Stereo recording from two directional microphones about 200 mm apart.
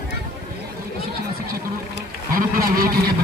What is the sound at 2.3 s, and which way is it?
Speech, 45° right (ahead or behind).